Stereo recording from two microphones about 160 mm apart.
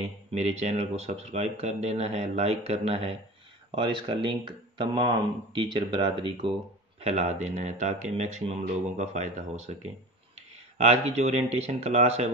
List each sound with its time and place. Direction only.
0.3 s speech: 45° right (ahead or behind)
10.3 s a sound: 40° right (ahead or behind)
11.5 s speech: 40° right (ahead or behind)